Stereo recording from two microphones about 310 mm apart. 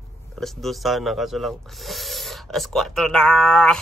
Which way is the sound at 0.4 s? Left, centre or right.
Centre.